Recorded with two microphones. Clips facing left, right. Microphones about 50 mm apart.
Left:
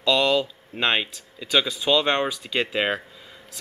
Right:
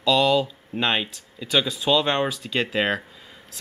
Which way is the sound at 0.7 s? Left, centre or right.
Centre.